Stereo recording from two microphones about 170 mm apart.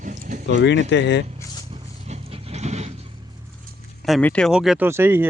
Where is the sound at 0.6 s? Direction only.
90° left.